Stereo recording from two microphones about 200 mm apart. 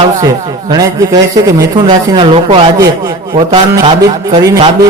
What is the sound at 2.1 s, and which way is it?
A man's voice, 25° right (ahead or behind).